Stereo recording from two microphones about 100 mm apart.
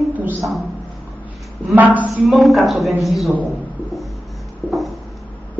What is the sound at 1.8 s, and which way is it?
Speech, 15° right (ahead or behind).